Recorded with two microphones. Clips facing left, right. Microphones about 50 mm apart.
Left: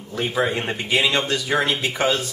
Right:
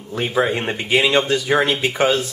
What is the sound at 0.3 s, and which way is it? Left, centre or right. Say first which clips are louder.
Speech: right 3 dB; centre.